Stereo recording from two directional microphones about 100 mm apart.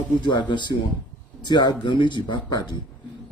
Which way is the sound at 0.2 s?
50° left (ahead or behind).